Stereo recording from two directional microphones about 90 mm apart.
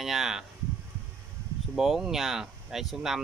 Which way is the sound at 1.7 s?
5° right (ahead or behind).